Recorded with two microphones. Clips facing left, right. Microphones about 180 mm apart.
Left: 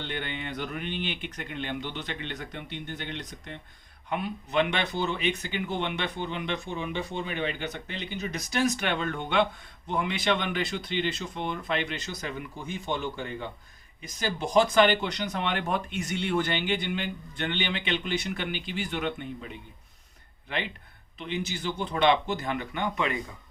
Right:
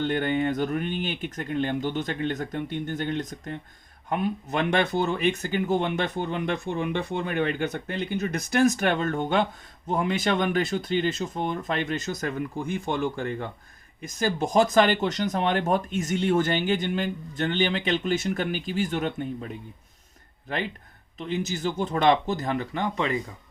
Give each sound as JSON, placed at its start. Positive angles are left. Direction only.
{"t": 0.0, "sound": "speech", "side_deg": -45}
{"t": 21.2, "sound": "speech", "side_deg": -40}